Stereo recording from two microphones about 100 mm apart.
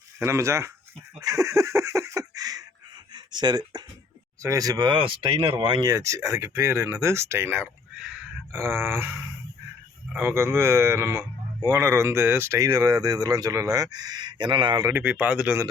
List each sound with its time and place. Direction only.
0.2 s speech: 30° right (ahead or behind)
1.2 s a sound: 35° right (ahead or behind)
3.1 s speech: 50° right (ahead or behind)
4.4 s speech: 35° right (ahead or behind); by 5.8 s 55° right (ahead or behind)
5.8 s speech: 30° right (ahead or behind)
10.2 s speech: 25° right (ahead or behind); by 14.8 s 50° right (ahead or behind)
15.0 s speech: 15° right (ahead or behind)